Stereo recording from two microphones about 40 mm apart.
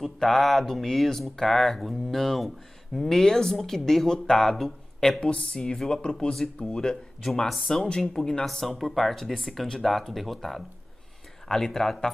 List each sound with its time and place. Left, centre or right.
0.2 s speech: centre
5.2 s speech: left; by 12.1 s centre